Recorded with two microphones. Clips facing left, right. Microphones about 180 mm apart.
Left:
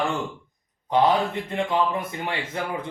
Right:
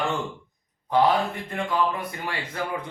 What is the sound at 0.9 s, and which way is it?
A man's voice, 20° left (ahead or behind).